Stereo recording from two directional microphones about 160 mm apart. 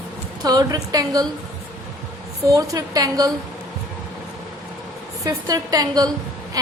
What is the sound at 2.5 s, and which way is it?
Speech, 20° right (ahead or behind).